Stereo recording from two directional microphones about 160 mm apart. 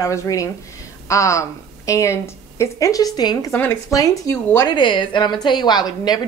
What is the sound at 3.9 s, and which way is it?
A woman's voice, 20° left (ahead or behind).